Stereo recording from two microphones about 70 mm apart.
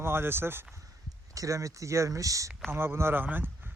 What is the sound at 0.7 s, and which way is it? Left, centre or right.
Speech, right.